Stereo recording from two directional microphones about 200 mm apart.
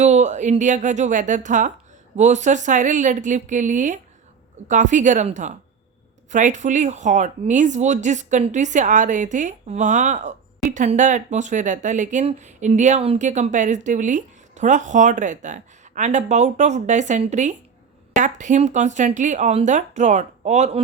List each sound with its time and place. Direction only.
0.0 s speech: 35° right (ahead or behind)